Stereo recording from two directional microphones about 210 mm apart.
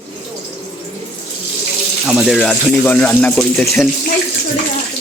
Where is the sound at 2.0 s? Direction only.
5° right (ahead or behind).